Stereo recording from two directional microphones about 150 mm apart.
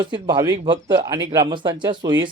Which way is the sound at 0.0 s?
30° right (ahead or behind).